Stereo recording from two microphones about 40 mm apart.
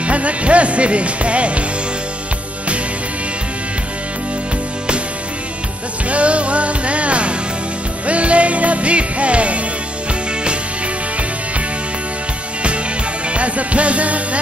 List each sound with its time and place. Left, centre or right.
0.0 s music: right
6.0 s music: right
13.3 s music: right